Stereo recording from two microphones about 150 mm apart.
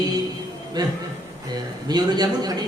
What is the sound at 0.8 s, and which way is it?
A man's voice, 25° right (ahead or behind).